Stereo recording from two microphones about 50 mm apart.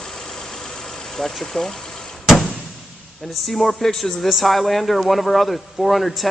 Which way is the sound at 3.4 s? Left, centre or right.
Centre.